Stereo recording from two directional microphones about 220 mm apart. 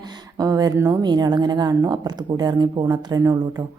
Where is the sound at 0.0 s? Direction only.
20° right (ahead or behind).